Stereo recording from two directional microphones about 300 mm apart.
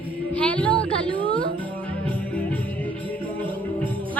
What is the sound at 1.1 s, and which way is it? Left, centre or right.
Music, centre.